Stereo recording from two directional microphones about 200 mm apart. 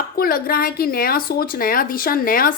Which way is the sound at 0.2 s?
45° left (ahead or behind).